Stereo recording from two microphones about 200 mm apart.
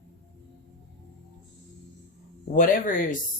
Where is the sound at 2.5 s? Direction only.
45° left (ahead or behind).